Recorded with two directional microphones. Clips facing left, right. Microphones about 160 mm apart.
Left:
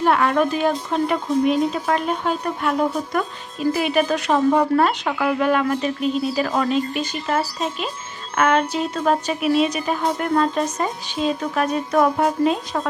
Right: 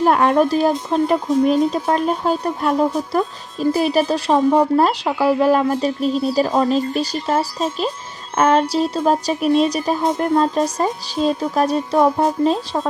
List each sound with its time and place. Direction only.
0.0 s speech: 40° right (ahead or behind)